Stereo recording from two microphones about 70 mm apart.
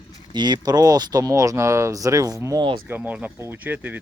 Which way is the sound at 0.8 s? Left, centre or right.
Right.